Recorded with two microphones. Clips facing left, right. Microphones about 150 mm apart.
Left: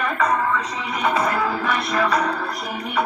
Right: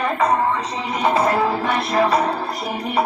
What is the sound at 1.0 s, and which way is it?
Music, 30° right (ahead or behind).